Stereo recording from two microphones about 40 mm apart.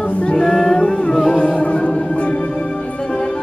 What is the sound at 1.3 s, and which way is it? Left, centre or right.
Music, left.